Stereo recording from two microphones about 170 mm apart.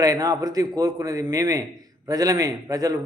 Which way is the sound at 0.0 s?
20° right (ahead or behind).